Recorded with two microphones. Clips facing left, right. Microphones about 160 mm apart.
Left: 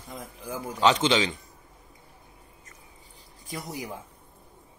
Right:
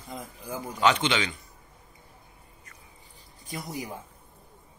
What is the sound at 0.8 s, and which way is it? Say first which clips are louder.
Speech: left 2 dB; 35° left (ahead or behind).